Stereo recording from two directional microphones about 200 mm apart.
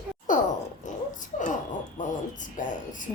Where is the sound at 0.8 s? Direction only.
40° left (ahead or behind).